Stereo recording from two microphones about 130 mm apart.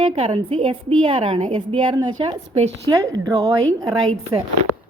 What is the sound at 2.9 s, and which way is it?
Speech, 30° right (ahead or behind).